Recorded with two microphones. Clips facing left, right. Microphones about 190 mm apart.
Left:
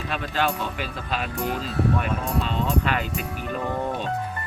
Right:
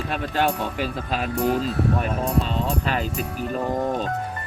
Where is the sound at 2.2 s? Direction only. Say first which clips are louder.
Right 2 dB; centre (ahead or behind).